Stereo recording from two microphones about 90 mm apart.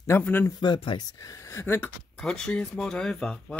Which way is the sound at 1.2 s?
35° left (ahead or behind).